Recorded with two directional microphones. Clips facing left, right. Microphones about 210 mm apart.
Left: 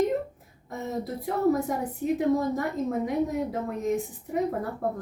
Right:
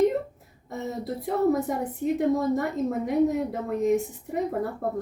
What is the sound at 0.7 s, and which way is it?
A woman's voice, centre (ahead or behind).